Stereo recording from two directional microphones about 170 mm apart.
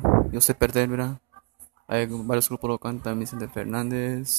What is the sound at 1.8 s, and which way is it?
Speech, 90° right.